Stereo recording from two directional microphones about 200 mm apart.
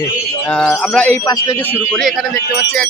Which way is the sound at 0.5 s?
5° left (ahead or behind).